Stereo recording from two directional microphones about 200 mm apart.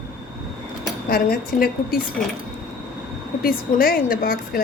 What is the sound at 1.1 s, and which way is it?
Speech, 50° left (ahead or behind).